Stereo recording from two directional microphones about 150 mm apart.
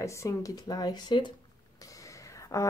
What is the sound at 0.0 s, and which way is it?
Speech, 20° left (ahead or behind).